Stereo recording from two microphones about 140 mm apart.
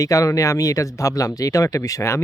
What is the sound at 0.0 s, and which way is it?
Speech, 25° left (ahead or behind).